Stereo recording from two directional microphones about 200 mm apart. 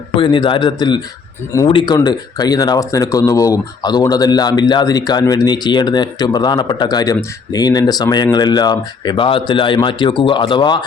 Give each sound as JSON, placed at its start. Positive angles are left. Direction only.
{"t": 0.2, "sound": "speech", "side_deg": 25}